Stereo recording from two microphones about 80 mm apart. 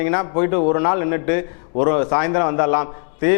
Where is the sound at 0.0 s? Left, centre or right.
Left.